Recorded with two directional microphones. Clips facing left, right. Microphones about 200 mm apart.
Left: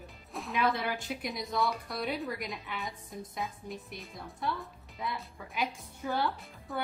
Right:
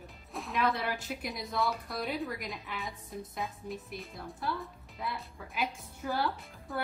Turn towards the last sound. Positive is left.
turn(degrees=0)  # may be behind; listen again after turning